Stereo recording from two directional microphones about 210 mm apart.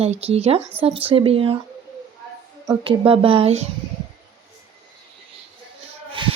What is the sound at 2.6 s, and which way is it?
A woman's voice, 25° right (ahead or behind).